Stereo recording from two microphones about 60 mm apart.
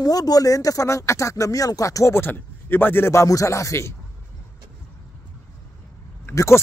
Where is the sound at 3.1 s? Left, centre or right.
Left.